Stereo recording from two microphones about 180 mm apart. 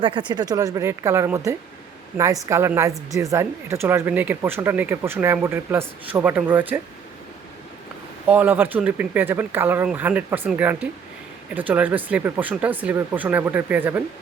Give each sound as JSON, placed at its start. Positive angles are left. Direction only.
{"t": 0.0, "sound": "a woman's voice", "side_deg": -25}
{"t": 8.3, "sound": "speech", "side_deg": -10}